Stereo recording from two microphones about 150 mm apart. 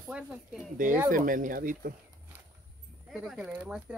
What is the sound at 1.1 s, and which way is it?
Speech, 65° right (ahead or behind).